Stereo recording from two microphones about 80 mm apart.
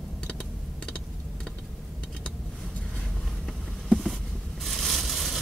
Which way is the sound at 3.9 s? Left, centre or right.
Centre.